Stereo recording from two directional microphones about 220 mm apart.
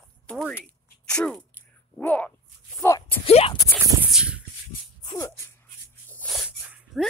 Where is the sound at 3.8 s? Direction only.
5° right (ahead or behind).